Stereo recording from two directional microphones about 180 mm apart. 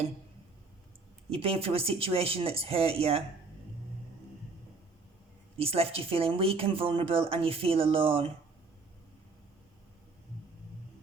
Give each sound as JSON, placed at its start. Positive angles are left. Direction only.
{"t": 1.3, "sound": "speech", "side_deg": -30}
{"t": 5.5, "sound": "speech", "side_deg": -35}